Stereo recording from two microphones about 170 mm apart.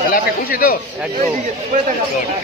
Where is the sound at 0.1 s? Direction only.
55° left (ahead or behind).